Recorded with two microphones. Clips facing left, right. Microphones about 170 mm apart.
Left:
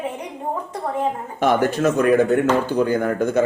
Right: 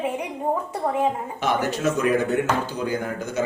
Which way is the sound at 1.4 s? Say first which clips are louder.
Left 6 dB; 50° left (ahead or behind).